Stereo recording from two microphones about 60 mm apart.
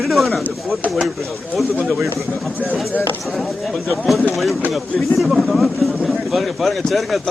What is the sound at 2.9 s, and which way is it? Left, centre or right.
Speech, left.